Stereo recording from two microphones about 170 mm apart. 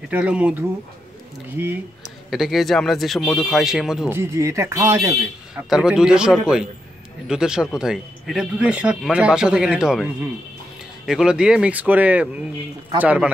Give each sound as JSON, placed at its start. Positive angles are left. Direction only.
{"t": 0.1, "sound": "speech", "side_deg": -5}
{"t": 2.3, "sound": "speech", "side_deg": 0}
{"t": 4.1, "sound": "speech", "side_deg": -15}
{"t": 5.5, "sound": "speech", "side_deg": -5}
{"t": 11.1, "sound": "speech", "side_deg": -5}